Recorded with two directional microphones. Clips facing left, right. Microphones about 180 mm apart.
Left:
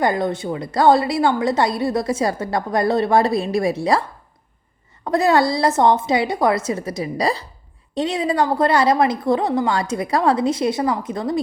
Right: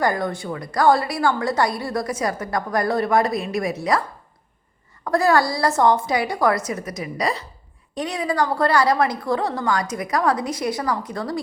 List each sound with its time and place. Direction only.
0.0 s a woman's voice: 20° left (ahead or behind)
5.0 s a woman's voice: 25° left (ahead or behind)